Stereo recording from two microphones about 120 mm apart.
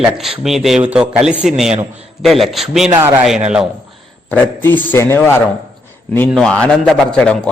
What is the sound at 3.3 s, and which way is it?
Speech, 5° right (ahead or behind).